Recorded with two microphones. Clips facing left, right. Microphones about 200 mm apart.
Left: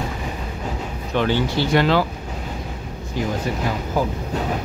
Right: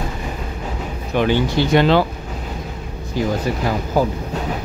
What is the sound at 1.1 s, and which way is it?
Speech, 15° right (ahead or behind).